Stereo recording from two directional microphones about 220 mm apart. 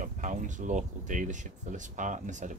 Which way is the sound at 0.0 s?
35° right (ahead or behind).